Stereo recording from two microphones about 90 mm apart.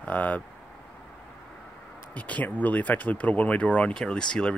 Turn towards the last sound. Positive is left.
turn(degrees=10)  # may be behind; listen again after turning